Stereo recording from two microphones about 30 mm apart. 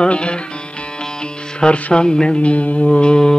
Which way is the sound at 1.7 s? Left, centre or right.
Left.